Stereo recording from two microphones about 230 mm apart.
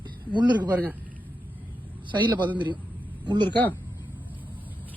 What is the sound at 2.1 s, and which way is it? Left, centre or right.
Speech, centre.